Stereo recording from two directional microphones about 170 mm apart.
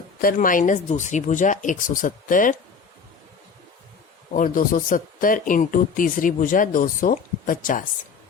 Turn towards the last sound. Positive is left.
turn(degrees=50)  # may be behind; listen again after turning